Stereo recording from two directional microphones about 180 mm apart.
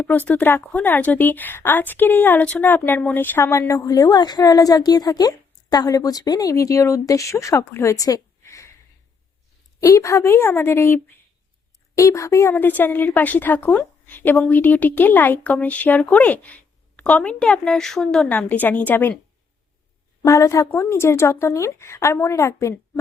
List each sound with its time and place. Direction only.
0.0 s a woman's voice: 10° left (ahead or behind)
9.8 s a woman's voice: 15° left (ahead or behind)
20.2 s a woman's voice: 15° left (ahead or behind)